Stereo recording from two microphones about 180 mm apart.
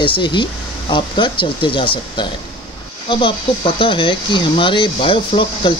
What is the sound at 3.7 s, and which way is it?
Speech, 30° left (ahead or behind).